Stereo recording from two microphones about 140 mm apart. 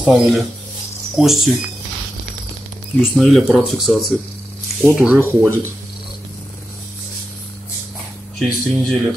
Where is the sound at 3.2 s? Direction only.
Centre (ahead or behind); by 5.7 s 15° right (ahead or behind).